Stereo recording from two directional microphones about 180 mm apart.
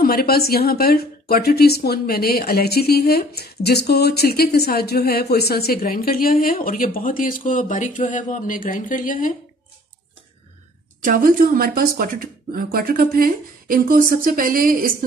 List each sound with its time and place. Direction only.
0.0 s a woman's voice: 60° left (ahead or behind)
11.0 s speech: 50° right (ahead or behind)